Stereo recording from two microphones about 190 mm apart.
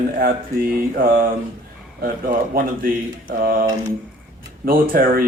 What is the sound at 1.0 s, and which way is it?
Speech, 50° right (ahead or behind).